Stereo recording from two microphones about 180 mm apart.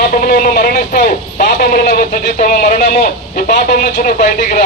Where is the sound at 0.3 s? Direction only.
50° left (ahead or behind).